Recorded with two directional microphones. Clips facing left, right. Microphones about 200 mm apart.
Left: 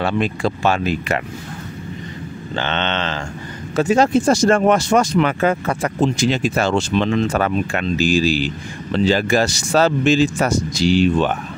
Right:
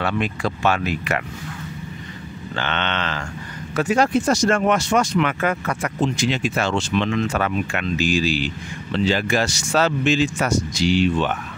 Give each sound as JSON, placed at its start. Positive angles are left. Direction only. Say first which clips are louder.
{"t": 0.0, "sound": "speech", "louder": "left 4 dB", "side_deg": 30}
{"t": 2.5, "sound": "speech", "louder": "left 3 dB", "side_deg": 25}